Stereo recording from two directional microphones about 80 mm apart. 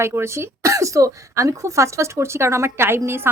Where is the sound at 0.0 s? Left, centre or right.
Right.